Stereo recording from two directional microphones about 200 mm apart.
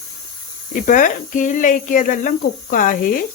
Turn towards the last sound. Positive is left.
turn(degrees=45)  # may be behind; listen again after turning